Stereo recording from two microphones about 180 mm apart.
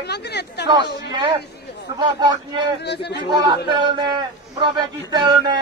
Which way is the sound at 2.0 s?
25° right (ahead or behind).